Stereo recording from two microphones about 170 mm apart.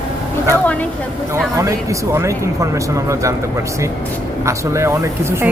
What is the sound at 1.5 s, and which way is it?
Speech, 20° right (ahead or behind).